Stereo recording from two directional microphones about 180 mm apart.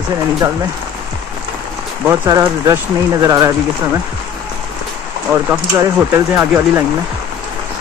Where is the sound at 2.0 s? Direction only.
20° right (ahead or behind).